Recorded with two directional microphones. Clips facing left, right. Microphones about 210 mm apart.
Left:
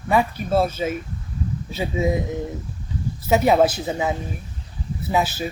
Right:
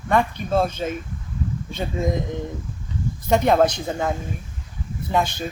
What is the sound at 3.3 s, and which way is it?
Speech, 5° left (ahead or behind).